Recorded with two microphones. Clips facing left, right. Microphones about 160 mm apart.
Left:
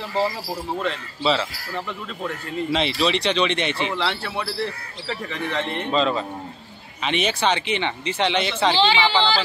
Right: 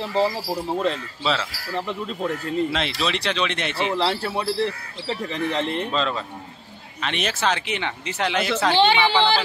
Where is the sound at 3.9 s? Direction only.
35° right (ahead or behind).